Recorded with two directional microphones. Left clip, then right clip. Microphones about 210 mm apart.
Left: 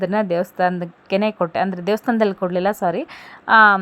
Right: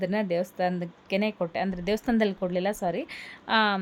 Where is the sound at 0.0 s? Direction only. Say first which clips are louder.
Left 8 dB; 15° left (ahead or behind).